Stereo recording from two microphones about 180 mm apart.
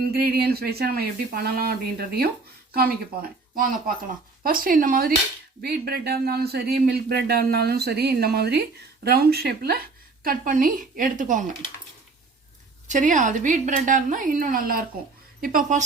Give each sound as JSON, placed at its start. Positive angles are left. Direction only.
{"t": 0.0, "sound": "a woman's voice", "side_deg": -60}
{"t": 12.9, "sound": "a woman's voice", "side_deg": -45}